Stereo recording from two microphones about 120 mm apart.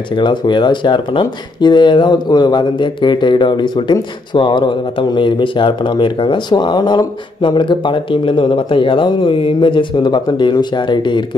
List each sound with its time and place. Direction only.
0.1 s speech: 40° left (ahead or behind)